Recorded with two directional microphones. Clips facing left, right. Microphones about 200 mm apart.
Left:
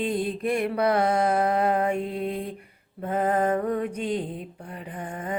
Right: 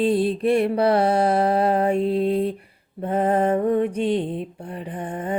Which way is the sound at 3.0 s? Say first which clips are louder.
Right 4 dB; 30° right (ahead or behind).